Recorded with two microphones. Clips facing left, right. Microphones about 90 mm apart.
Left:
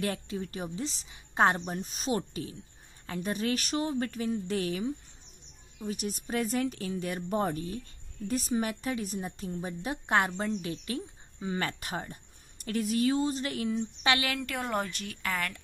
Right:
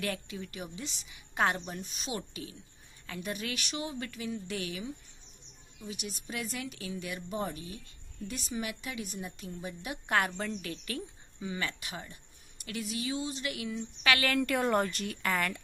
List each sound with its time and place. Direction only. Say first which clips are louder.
0.0 s a woman's voice: left 4 dB; 30° left (ahead or behind)
11.4 s a woman's voice: left 4 dB; 40° left (ahead or behind)
14.2 s speech: right 5 dB; 5° left (ahead or behind)